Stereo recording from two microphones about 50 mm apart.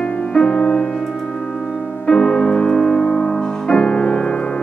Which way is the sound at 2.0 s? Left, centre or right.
Centre.